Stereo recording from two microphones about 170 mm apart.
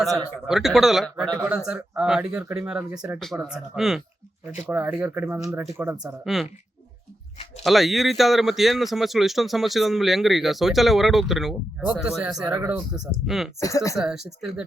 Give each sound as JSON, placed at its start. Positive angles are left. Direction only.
{"t": 0.4, "sound": "a man's voice", "side_deg": 0}
{"t": 6.2, "sound": "a man's voice", "side_deg": 0}
{"t": 7.6, "sound": "a man's voice", "side_deg": 0}
{"t": 13.6, "sound": "speech", "side_deg": 20}
{"t": 13.9, "sound": "a man's voice", "side_deg": -5}